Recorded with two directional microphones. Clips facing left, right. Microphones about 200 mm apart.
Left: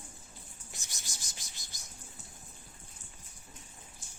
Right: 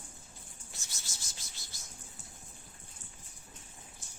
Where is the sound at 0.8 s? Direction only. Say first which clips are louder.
Left 1 dB; 15° left (ahead or behind).